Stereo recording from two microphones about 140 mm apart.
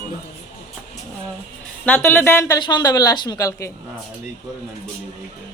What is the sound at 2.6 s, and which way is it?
A woman's voice, 30° left (ahead or behind).